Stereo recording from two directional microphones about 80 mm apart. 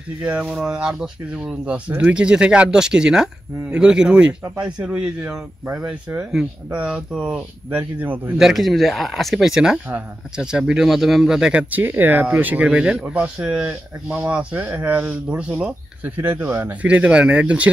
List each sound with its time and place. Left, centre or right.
0.2 s speech: centre
7.7 s speech: right
8.4 s speech: centre
11.7 s speech: right
12.6 s speech: centre
16.2 s speech: right